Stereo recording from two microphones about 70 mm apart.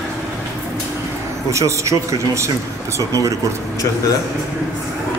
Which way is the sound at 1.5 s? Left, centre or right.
Right.